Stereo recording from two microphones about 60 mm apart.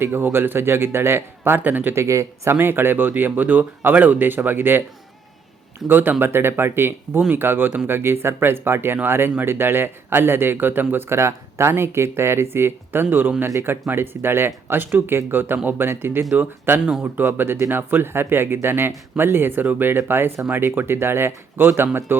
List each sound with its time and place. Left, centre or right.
0.0 s speech: right
2.0 s speech: right
5.9 s speech: right
11.1 s speech: right
16.8 s speech: centre
17.2 s speech: right